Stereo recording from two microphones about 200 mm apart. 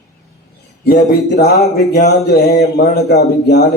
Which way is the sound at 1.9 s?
55° left (ahead or behind).